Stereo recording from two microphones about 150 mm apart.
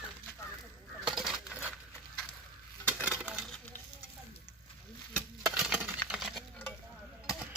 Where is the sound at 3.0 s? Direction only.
5° right (ahead or behind).